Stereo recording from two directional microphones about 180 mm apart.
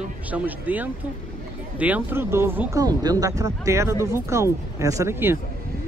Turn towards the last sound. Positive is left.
turn(degrees=-15)  # may be behind; listen again after turning